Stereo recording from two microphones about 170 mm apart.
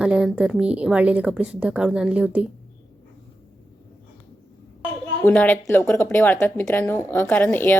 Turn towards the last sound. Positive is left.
turn(degrees=10)  # may be behind; listen again after turning